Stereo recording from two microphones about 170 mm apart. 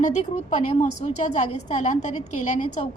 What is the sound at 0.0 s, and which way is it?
A woman's voice, 45° left (ahead or behind).